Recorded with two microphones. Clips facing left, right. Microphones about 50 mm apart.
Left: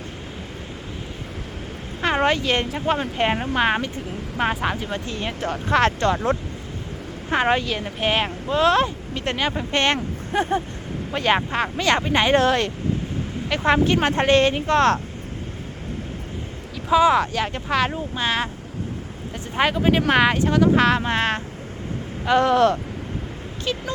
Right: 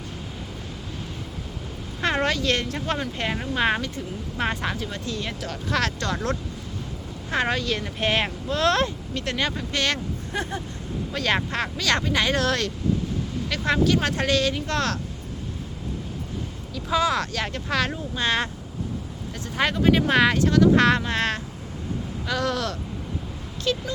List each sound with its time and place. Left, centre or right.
2.0 s a sound: centre
2.6 s speech: centre
3.0 s speech: left
3.6 s speech: left
7.3 s speech: left
7.9 s speech: centre
9.5 s speech: left
12.0 s speech: left
16.9 s speech: centre
19.5 s speech: centre
20.7 s speech: centre
21.0 s speech: left
23.7 s speech: centre